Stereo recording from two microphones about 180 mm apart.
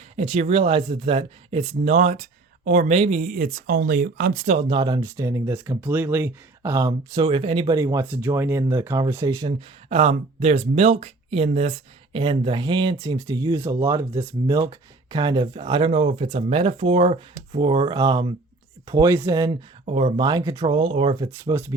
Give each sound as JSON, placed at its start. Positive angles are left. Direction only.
{"t": 0.2, "sound": "speech", "side_deg": -35}
{"t": 4.7, "sound": "speech", "side_deg": -25}
{"t": 8.0, "sound": "speech", "side_deg": -10}
{"t": 9.4, "sound": "speech", "side_deg": -30}
{"t": 21.2, "sound": "speech", "side_deg": -15}